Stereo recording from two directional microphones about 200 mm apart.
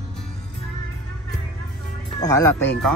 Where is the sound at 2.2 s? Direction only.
15° left (ahead or behind).